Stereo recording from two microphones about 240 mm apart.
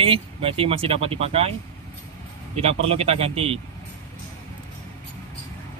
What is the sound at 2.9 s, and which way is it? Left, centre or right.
Speech, right.